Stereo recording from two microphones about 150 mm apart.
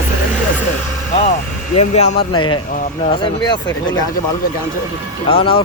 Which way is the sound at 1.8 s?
45° left (ahead or behind).